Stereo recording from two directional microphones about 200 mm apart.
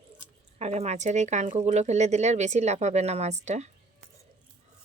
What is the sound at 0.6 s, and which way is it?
Speech, 35° right (ahead or behind).